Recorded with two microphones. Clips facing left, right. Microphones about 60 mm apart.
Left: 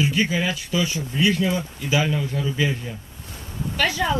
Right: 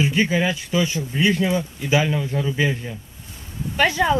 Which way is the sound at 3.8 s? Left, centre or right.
Right.